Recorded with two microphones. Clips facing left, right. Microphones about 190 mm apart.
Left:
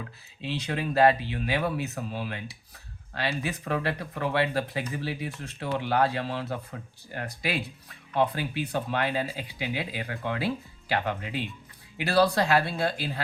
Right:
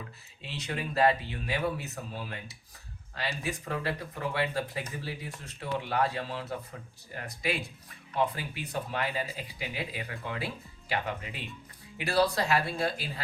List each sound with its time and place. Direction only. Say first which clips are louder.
0.4 s speech: left 6 dB; 65° left (ahead or behind)